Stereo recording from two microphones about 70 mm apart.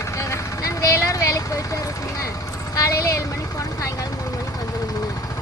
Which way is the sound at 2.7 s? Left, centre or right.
Left.